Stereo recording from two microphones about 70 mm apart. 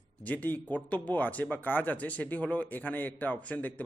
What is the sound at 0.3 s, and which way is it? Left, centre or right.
Speech, left.